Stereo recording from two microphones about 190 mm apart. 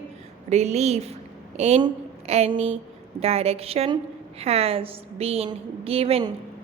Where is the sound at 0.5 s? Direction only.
35° right (ahead or behind).